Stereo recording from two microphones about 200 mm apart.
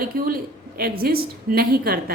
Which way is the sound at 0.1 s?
45° right (ahead or behind).